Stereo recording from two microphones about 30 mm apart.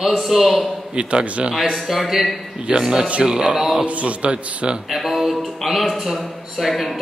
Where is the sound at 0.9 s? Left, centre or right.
Right.